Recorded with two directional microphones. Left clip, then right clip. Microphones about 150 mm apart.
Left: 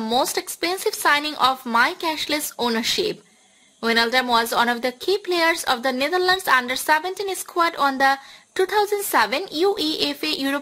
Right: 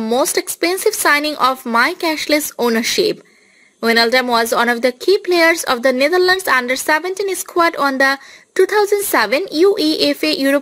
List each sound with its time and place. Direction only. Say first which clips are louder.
0.2 s speech: right 6 dB; 25° right (ahead or behind)